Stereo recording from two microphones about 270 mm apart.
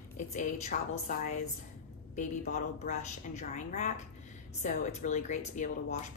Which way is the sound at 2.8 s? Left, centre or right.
Left.